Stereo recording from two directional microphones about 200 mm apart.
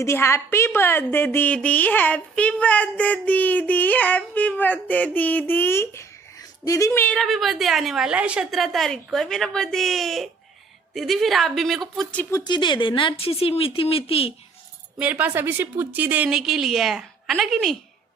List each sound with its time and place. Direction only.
0.0 s a woman's voice: 15° left (ahead or behind)
12.3 s speech: 20° left (ahead or behind)
14.9 s a woman's voice: 5° right (ahead or behind)